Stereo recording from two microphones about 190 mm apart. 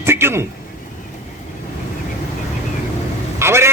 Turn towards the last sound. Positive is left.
turn(degrees=-15)  # may be behind; listen again after turning